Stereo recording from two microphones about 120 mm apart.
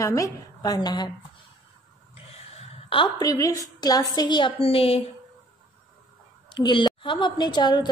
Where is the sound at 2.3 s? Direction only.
60° left (ahead or behind).